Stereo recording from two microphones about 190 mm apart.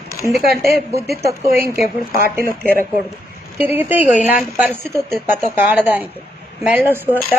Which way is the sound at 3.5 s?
10° right (ahead or behind).